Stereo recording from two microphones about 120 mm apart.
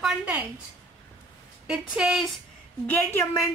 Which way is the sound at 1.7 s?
5° right (ahead or behind).